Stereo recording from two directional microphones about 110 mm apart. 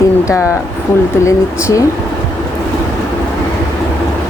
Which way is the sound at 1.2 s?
30° left (ahead or behind).